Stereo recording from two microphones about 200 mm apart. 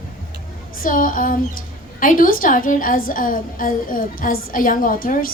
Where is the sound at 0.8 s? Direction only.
40° left (ahead or behind).